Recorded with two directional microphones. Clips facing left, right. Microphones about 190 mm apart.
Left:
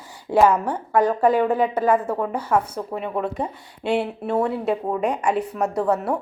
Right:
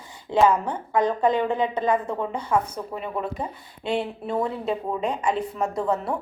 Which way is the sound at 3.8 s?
10° left (ahead or behind).